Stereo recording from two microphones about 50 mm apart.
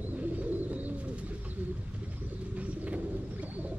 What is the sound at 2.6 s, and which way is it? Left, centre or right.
Bird, right.